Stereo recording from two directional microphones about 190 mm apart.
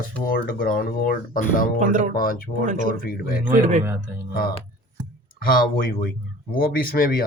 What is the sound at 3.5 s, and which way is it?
Speech, 40° right (ahead or behind).